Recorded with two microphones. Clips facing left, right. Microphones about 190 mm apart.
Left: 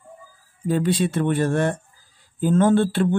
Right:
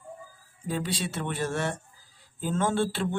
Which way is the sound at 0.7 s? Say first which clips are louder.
Left 10 dB; 55° left (ahead or behind).